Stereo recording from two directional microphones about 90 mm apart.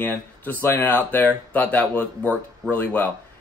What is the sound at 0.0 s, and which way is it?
A man's voice, 20° left (ahead or behind).